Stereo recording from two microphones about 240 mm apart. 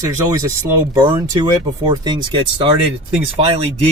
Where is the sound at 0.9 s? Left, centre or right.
Centre.